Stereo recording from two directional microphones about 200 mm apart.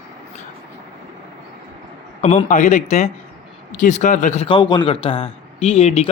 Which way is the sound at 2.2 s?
35° left (ahead or behind).